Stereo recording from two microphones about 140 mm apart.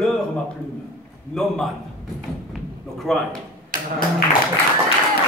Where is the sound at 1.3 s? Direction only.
5° left (ahead or behind).